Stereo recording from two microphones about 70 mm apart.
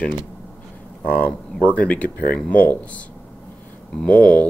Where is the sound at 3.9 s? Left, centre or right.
Centre.